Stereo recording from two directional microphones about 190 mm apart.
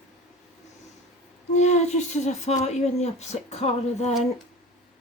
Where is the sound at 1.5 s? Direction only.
35° left (ahead or behind).